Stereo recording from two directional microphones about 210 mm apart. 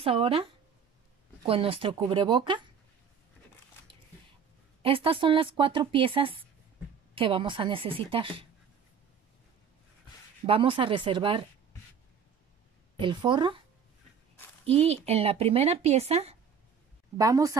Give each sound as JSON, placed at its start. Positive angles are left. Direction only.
{"t": 0.0, "sound": "speech", "side_deg": -25}
{"t": 1.4, "sound": "speech", "side_deg": -25}
{"t": 4.8, "sound": "speech", "side_deg": -25}
{"t": 10.4, "sound": "speech", "side_deg": -25}
{"t": 13.0, "sound": "speech", "side_deg": -20}
{"t": 14.7, "sound": "speech", "side_deg": -30}
{"t": 17.2, "sound": "speech", "side_deg": -15}